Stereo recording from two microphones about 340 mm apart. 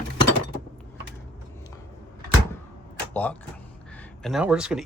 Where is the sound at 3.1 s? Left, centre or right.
Centre.